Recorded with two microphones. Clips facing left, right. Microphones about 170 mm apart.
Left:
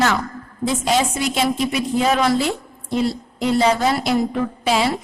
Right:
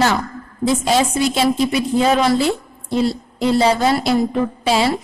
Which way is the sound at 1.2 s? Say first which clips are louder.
Right 4 dB; 35° right (ahead or behind).